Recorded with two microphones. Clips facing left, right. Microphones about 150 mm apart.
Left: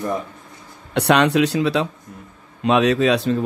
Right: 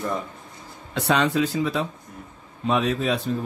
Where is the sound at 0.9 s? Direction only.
70° left (ahead or behind).